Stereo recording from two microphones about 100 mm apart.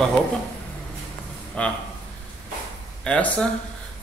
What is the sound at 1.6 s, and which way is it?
Speech, 10° left (ahead or behind).